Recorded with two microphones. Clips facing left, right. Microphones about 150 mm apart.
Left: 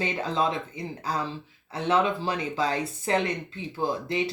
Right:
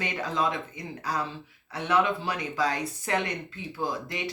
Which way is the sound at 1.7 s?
25° left (ahead or behind).